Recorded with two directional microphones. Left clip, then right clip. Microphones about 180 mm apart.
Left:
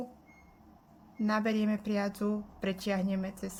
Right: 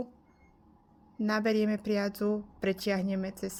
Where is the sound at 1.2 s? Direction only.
35° right (ahead or behind).